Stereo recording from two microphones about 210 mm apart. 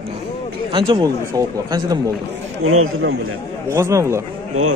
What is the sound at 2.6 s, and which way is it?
Speech, 80° right.